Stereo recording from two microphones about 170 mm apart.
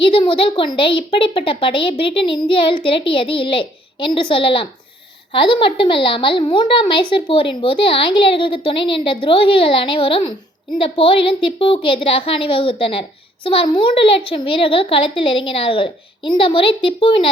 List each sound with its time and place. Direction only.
0.0 s a woman's voice: 30° left (ahead or behind)